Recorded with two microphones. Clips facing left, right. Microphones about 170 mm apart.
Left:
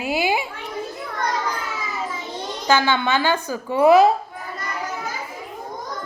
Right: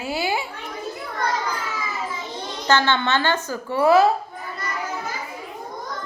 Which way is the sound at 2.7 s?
10° left (ahead or behind).